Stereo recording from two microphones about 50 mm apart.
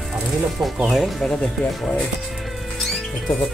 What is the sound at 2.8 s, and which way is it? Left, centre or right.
Music, centre.